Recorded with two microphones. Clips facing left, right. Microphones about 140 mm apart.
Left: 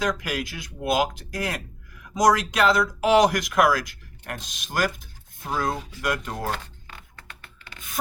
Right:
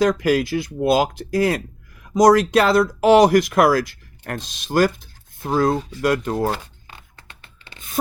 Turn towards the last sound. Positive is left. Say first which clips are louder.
# even
turn(degrees=-25)  # may be behind; listen again after turning